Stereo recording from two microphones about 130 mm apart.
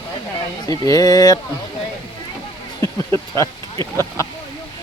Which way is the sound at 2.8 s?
25° left (ahead or behind).